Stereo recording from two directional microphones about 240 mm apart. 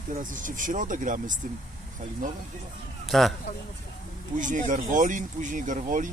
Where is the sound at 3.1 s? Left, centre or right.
Centre.